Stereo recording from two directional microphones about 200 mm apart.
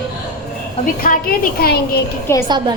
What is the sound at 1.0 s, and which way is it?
Speech, 45° left (ahead or behind).